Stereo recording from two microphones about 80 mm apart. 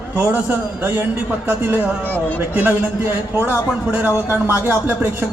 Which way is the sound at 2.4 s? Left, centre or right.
Right.